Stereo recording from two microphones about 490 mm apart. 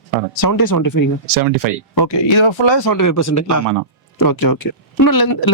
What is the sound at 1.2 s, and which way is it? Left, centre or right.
Speech, right.